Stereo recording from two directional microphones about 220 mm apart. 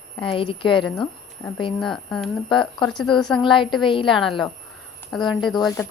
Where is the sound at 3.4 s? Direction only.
20° left (ahead or behind).